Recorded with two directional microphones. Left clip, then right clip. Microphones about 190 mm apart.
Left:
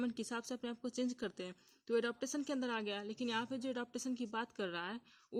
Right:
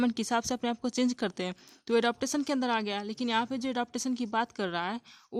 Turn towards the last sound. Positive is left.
turn(degrees=-25)  # may be behind; listen again after turning